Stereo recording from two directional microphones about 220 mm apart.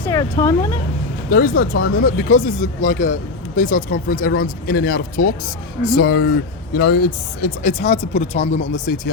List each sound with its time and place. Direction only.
0.0 s speech: 15° left (ahead or behind)
1.3 s speech: 40° left (ahead or behind)
7.4 s speech: 35° left (ahead or behind)